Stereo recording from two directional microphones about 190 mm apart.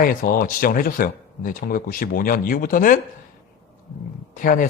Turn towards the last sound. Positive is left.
turn(degrees=45)  # may be behind; listen again after turning